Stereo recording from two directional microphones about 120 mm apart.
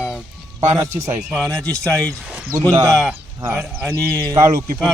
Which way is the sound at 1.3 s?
5° left (ahead or behind).